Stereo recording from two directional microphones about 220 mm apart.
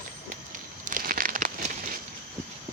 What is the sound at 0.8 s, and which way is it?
Crumpling, 40° right (ahead or behind).